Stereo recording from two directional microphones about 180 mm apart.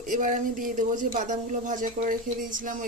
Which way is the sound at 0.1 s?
45° right (ahead or behind).